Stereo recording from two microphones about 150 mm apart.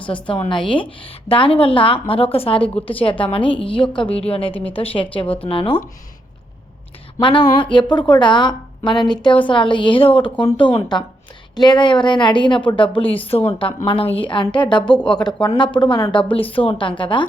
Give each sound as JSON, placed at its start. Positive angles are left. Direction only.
{"t": 0.6, "sound": "a woman's voice", "side_deg": 35}
{"t": 7.2, "sound": "a woman's voice", "side_deg": 35}
{"t": 14.8, "sound": "speech", "side_deg": 5}
{"t": 15.2, "sound": "a woman's voice", "side_deg": 30}
{"t": 16.1, "sound": "a woman's voice", "side_deg": 35}